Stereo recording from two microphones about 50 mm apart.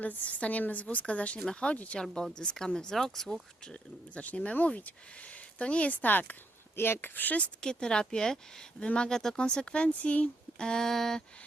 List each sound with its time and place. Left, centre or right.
0.0 s speech: left
2.3 s speech: centre
4.1 s speech: left
6.7 s speech: left
7.6 s speech: centre
10.6 s speech: centre